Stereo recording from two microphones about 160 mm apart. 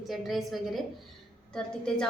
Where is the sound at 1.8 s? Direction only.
5° left (ahead or behind).